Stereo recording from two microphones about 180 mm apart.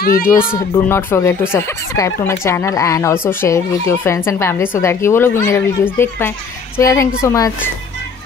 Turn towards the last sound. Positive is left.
turn(degrees=15)  # may be behind; listen again after turning